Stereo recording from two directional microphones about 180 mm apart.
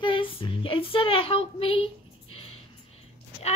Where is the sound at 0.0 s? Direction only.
25° left (ahead or behind).